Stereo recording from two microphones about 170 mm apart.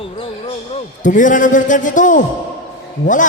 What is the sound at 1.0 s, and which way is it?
A man's voice, 50° left (ahead or behind).